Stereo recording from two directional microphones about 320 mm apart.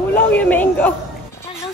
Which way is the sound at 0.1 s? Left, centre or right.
Centre.